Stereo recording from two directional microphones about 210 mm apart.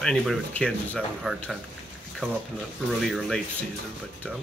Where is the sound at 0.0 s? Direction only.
Centre (ahead or behind).